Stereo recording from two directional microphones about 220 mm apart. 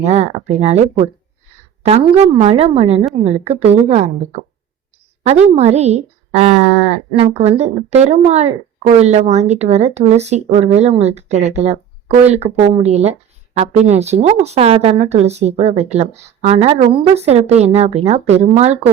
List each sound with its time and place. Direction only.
0.0 s speech: 30° right (ahead or behind)